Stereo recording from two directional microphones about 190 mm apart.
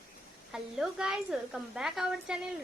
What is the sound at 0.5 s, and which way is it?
A woman's voice, 5° right (ahead or behind).